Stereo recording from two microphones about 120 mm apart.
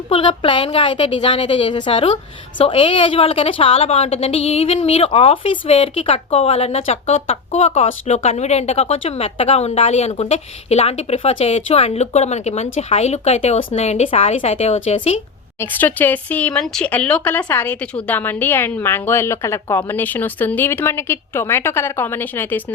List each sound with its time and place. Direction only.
0.1 s a woman's voice: 45° left (ahead or behind)
15.6 s speech: 15° left (ahead or behind)